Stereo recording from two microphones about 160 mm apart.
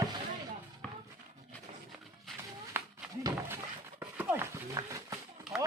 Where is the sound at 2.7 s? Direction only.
15° right (ahead or behind).